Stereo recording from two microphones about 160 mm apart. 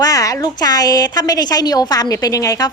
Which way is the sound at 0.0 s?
20° left (ahead or behind).